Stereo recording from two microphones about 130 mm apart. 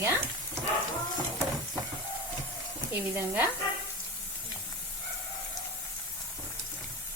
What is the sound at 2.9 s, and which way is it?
Speech, 15° right (ahead or behind).